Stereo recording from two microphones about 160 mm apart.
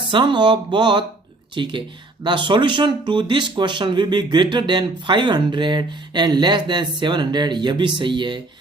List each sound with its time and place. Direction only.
0.0 s speech: 30° right (ahead or behind)